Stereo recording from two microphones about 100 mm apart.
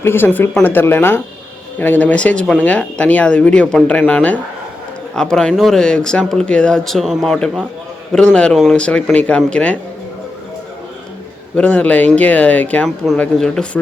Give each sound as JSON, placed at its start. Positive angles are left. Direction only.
{"t": 0.0, "sound": "speech", "side_deg": 20}
{"t": 8.1, "sound": "speech", "side_deg": 10}
{"t": 11.5, "sound": "speech", "side_deg": 15}